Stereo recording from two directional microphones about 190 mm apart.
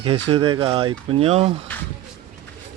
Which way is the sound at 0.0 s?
30° right (ahead or behind).